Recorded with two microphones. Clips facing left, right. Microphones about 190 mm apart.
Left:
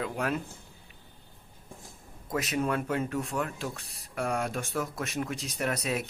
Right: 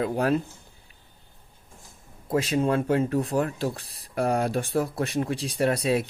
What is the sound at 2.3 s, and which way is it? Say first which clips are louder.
A child's voice: right 6 dB; 30° right (ahead or behind).